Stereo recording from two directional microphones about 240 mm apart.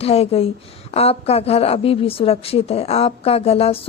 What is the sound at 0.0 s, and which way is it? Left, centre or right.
A woman's voice, left.